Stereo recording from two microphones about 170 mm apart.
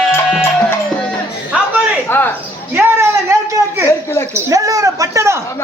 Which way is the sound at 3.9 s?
15° left (ahead or behind).